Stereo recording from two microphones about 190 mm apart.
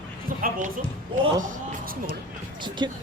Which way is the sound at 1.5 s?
50° right (ahead or behind).